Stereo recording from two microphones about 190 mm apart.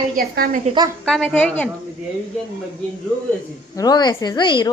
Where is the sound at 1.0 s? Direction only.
5° left (ahead or behind).